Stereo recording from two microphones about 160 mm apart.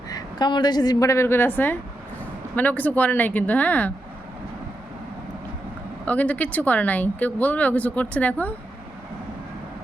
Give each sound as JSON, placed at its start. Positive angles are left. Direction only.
{"t": 0.1, "sound": "a woman's voice", "side_deg": 25}
{"t": 6.1, "sound": "speech", "side_deg": 10}